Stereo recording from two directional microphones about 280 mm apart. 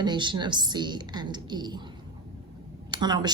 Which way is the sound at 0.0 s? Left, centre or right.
Centre.